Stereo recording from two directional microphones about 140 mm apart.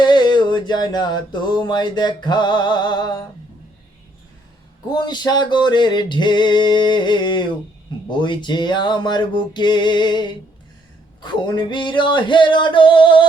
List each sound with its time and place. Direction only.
0.0 s music: 30° left (ahead or behind)
4.9 s male singing: 30° left (ahead or behind)